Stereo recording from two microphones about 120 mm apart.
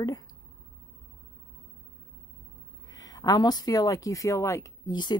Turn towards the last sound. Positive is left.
turn(degrees=40)  # may be behind; listen again after turning